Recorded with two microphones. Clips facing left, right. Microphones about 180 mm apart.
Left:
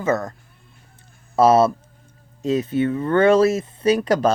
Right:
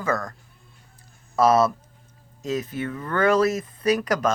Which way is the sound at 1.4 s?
30° left (ahead or behind).